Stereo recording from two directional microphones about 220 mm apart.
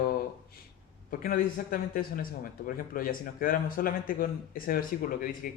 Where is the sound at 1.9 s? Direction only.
40° left (ahead or behind).